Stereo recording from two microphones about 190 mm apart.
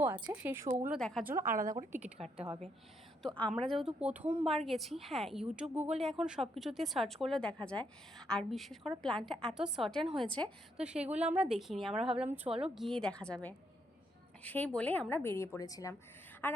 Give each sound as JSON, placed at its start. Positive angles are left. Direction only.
{"t": 0.0, "sound": "speech", "side_deg": -10}
{"t": 0.9, "sound": "a woman's voice", "side_deg": 0}
{"t": 1.2, "sound": "speech", "side_deg": -10}
{"t": 1.5, "sound": "a woman's voice", "side_deg": -45}
{"t": 1.7, "sound": "a woman's voice", "side_deg": -10}
{"t": 3.2, "sound": "a woman's voice", "side_deg": 5}
{"t": 10.8, "sound": "a woman's voice", "side_deg": -5}
{"t": 12.5, "sound": "speech", "side_deg": -30}
{"t": 12.7, "sound": "a woman's voice", "side_deg": 0}